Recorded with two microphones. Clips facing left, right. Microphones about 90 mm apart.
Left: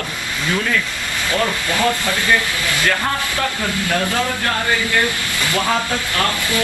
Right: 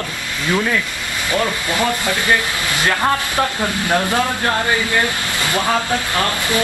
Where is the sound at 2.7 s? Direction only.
20° right (ahead or behind).